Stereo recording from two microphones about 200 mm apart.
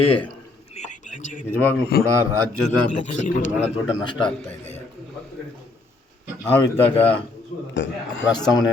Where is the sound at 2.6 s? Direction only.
35° left (ahead or behind).